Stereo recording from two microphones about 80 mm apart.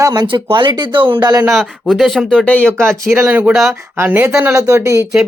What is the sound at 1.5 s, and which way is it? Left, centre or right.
Speech, centre.